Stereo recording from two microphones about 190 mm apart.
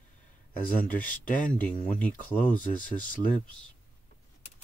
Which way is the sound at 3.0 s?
45° left (ahead or behind).